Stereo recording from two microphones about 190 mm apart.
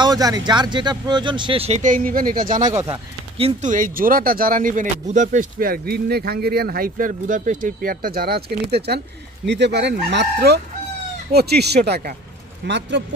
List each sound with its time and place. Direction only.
0.0 s speech: 20° right (ahead or behind); by 2.7 s 45° right (ahead or behind)
2.9 s speech: 30° right (ahead or behind)
3.7 s speech: 45° right (ahead or behind)
12.6 s speech: 70° right (ahead or behind)